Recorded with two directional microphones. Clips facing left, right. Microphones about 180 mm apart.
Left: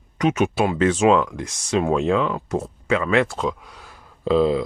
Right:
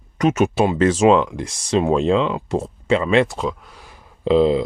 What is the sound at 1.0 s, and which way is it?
Speech, 25° right (ahead or behind).